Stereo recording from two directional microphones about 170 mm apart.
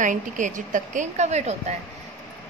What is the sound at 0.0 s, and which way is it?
A woman's voice, 50° right (ahead or behind).